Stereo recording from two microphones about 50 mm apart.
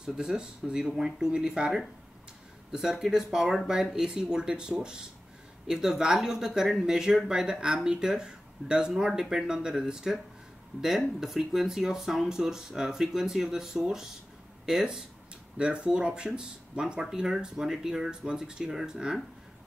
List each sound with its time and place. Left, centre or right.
0.0 s speech: centre